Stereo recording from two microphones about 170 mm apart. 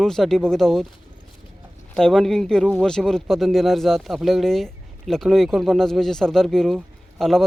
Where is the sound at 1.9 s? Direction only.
5° left (ahead or behind).